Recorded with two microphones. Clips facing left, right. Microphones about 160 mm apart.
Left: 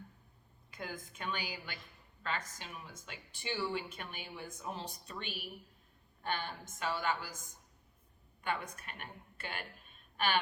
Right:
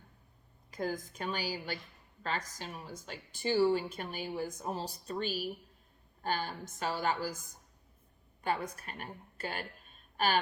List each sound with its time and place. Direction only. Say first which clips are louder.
0.7 s a woman's voice: right 9 dB; 40° right (ahead or behind)
8.4 s a woman's voice: right 4 dB; 35° right (ahead or behind)